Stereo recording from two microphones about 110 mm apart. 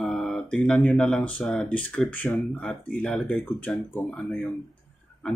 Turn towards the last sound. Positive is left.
turn(degrees=0)  # may be behind; listen again after turning